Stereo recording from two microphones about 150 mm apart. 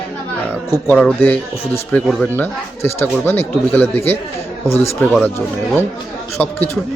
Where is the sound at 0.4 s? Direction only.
15° left (ahead or behind).